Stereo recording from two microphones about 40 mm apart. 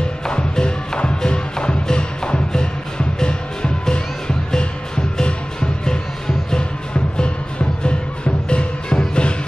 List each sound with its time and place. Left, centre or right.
0.3 s music: left
8.5 s music: left